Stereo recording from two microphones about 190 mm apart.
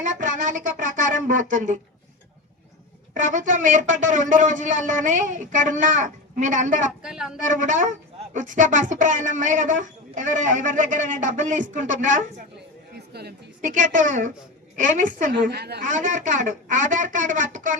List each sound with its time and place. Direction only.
0.0 s speech: 40° right (ahead or behind)
3.2 s speech: 40° right (ahead or behind)
7.0 s speech: 5° right (ahead or behind)
7.4 s a woman's voice: 40° right (ahead or behind)
13.1 s a woman's voice: 60° right (ahead or behind)
13.6 s speech: 40° right (ahead or behind)
15.4 s a woman's voice: 60° right (ahead or behind)
15.9 s a woman's voice: 40° right (ahead or behind)